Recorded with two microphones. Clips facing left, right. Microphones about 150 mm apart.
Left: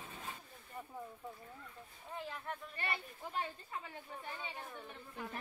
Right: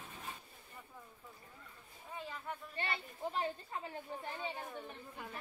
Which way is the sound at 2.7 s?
25° right (ahead or behind).